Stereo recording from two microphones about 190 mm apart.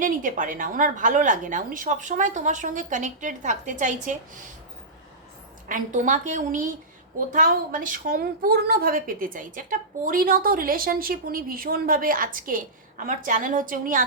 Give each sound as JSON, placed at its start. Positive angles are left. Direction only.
{"t": 0.0, "sound": "a woman's voice", "side_deg": -45}
{"t": 5.6, "sound": "a woman's voice", "side_deg": -45}